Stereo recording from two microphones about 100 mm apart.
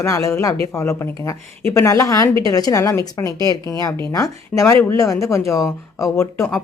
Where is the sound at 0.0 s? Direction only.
35° left (ahead or behind).